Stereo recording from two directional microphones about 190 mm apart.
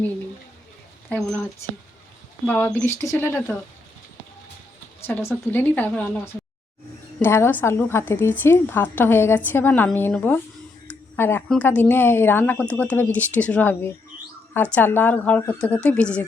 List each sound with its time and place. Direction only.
2.5 s a woman's voice: 10° left (ahead or behind)
4.9 s a woman's voice: 10° left (ahead or behind)